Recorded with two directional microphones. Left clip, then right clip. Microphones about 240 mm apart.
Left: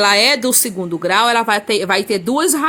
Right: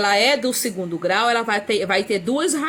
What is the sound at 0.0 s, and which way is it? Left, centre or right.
Speech, left.